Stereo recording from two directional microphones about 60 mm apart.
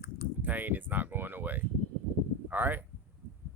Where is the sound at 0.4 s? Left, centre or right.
Right.